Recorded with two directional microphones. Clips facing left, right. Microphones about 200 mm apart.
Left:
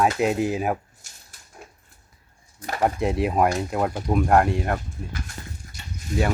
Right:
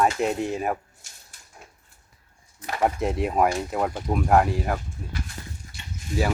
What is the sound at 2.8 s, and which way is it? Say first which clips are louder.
Speech: left 1 dB; centre (ahead or behind).